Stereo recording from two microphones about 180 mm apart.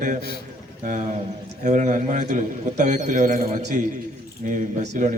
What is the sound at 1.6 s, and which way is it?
A man's voice, 45° right (ahead or behind).